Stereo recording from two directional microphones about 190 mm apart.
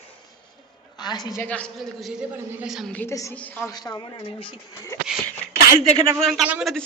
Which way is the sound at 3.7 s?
20° left (ahead or behind).